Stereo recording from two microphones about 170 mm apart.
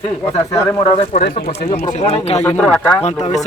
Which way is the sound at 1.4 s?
60° left (ahead or behind).